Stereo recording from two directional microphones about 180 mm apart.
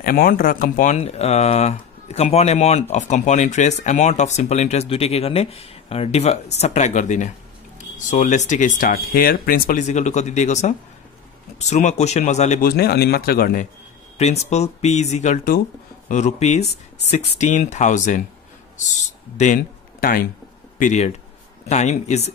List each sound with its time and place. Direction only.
0.0 s speech: 55° left (ahead or behind)
12.6 s speech: 60° left (ahead or behind)
14.1 s speech: 40° left (ahead or behind)
19.3 s speech: 40° left (ahead or behind)
20.8 s speech: 40° left (ahead or behind)